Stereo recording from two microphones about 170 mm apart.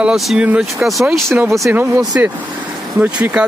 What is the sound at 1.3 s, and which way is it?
Speech, 15° right (ahead or behind).